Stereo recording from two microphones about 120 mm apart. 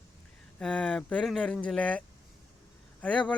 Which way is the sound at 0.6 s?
10° left (ahead or behind).